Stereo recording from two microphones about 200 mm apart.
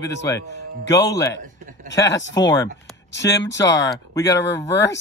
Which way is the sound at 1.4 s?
40° right (ahead or behind).